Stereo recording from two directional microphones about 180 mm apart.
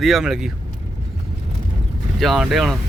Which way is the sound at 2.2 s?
Centre (ahead or behind).